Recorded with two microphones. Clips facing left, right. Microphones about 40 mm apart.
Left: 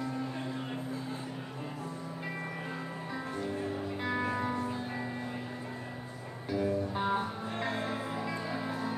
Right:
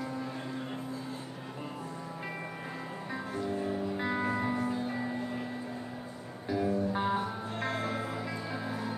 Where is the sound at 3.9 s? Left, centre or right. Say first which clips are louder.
Left 1 dB; centre.